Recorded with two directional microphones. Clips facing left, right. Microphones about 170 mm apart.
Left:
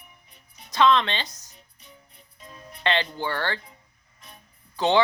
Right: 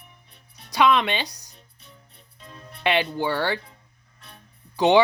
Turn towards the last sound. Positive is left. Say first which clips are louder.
# right 4 dB
turn(degrees=-15)  # may be behind; listen again after turning